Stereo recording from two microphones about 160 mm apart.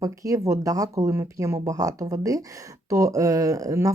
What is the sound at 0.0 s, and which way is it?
Speech, 20° right (ahead or behind).